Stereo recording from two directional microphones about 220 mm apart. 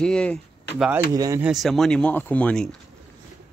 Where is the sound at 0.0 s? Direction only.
5° left (ahead or behind).